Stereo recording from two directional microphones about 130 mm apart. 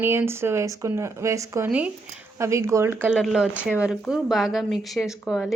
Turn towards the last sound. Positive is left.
turn(degrees=-5)  # may be behind; listen again after turning